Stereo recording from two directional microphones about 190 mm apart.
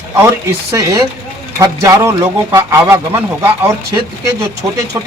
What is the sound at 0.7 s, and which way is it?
A man's voice, 20° right (ahead or behind).